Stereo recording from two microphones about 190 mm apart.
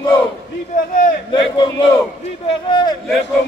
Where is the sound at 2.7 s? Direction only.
25° left (ahead or behind).